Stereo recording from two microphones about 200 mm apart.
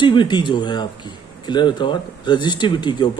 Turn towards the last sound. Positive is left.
turn(degrees=20)  # may be behind; listen again after turning